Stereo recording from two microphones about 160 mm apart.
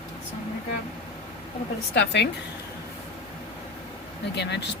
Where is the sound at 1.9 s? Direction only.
90° left.